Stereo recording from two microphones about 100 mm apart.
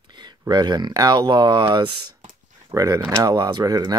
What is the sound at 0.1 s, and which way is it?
Speech, 50° right (ahead or behind).